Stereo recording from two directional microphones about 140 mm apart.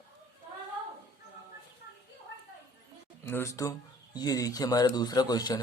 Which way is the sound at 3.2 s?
20° left (ahead or behind).